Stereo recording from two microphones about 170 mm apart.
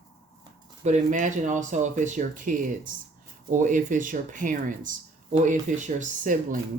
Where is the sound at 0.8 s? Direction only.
45° right (ahead or behind).